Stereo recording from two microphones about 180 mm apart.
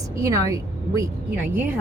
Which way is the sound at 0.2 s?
15° right (ahead or behind).